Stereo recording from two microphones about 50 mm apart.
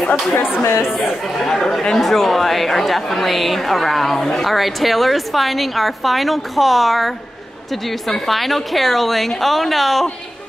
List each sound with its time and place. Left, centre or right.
0.3 s speech: left
1.4 s speech: centre